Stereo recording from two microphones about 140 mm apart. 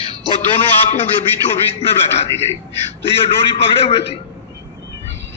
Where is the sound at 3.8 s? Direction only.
45° left (ahead or behind).